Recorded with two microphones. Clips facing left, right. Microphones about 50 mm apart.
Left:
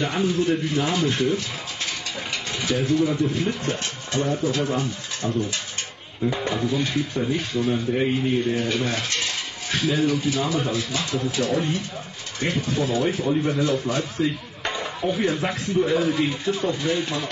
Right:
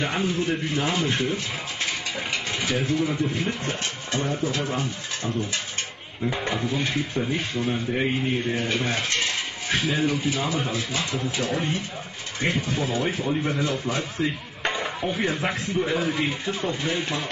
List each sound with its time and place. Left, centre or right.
0.0 s speech: centre